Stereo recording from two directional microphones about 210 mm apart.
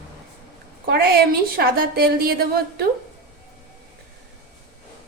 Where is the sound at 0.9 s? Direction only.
45° right (ahead or behind).